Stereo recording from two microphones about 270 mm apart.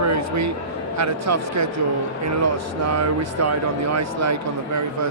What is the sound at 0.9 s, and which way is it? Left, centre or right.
Speech, right.